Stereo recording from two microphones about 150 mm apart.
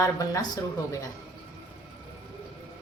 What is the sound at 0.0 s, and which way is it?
Speech, 20° left (ahead or behind).